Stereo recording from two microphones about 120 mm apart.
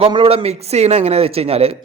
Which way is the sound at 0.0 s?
50° right (ahead or behind).